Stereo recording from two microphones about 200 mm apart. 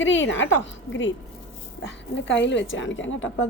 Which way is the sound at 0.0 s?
70° left (ahead or behind).